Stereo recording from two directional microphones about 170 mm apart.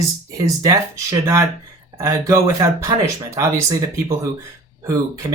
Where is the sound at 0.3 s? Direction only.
20° right (ahead or behind).